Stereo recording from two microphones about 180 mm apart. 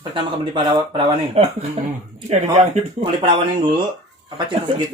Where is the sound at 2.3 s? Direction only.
40° right (ahead or behind).